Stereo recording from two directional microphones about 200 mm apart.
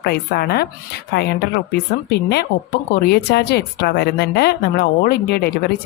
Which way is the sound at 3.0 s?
55° left (ahead or behind).